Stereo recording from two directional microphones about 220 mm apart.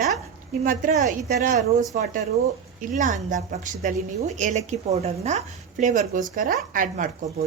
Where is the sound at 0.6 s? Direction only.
35° right (ahead or behind).